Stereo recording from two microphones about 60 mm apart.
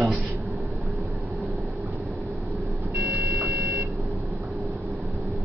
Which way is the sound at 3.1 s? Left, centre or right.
Right.